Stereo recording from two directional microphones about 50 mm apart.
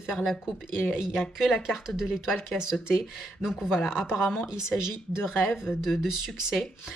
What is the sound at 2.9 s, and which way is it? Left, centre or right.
Speech, centre.